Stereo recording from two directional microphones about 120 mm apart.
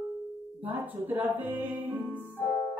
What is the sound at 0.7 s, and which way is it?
Music, 15° right (ahead or behind).